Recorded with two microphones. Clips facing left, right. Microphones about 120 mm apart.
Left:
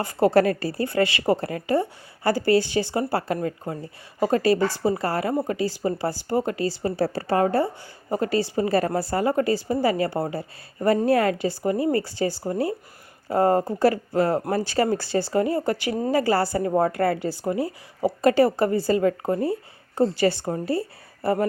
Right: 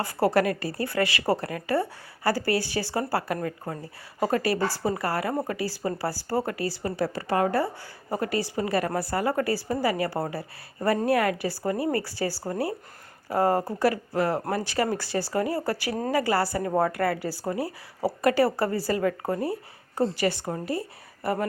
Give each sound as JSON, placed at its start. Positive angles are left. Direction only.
{"t": 0.0, "sound": "a woman's voice", "side_deg": 25}